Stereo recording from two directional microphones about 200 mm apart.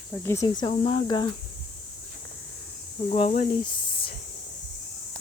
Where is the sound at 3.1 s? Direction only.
30° left (ahead or behind).